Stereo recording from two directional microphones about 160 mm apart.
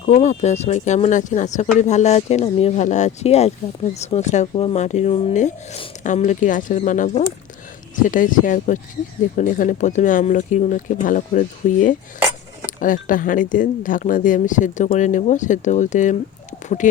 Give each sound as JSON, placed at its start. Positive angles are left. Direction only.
{"t": 0.0, "sound": "speech", "side_deg": 45}